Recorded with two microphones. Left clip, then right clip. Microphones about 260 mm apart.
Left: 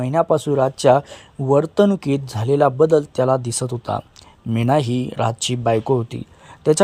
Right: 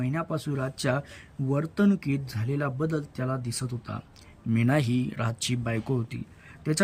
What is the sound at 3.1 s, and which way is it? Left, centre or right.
Speech, left.